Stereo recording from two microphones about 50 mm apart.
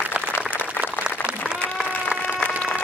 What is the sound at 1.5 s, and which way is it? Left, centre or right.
Applause, right.